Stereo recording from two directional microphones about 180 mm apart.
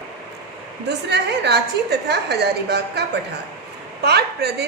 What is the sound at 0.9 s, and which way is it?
A woman's voice, 70° right (ahead or behind).